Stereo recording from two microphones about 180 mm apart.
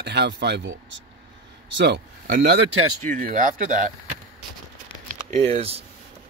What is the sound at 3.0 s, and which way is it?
Speech, 45° right (ahead or behind).